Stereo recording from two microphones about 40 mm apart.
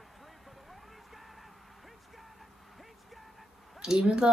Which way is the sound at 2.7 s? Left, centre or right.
Centre.